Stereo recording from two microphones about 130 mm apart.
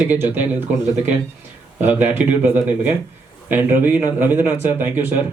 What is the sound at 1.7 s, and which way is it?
A man's voice, 15° right (ahead or behind).